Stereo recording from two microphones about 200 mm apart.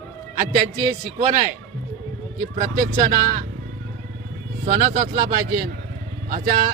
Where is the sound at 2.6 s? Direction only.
40° right (ahead or behind).